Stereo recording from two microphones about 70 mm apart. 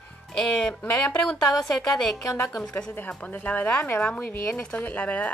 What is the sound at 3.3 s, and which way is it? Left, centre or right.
Speech, left.